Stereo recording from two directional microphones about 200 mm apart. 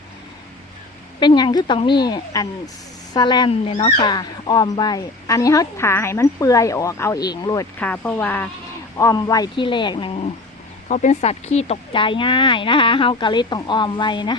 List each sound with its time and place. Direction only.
1.2 s speech: 25° left (ahead or behind)
10.8 s speech: 35° left (ahead or behind); by 14.3 s 20° left (ahead or behind)